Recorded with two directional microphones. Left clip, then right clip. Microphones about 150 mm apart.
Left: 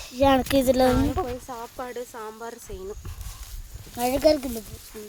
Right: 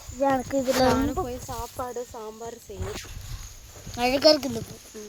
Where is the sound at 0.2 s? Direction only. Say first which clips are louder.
Left 4 dB; 45° left (ahead or behind).